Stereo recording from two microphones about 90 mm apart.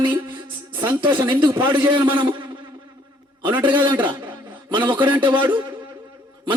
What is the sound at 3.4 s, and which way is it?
A man's voice, 60° right (ahead or behind).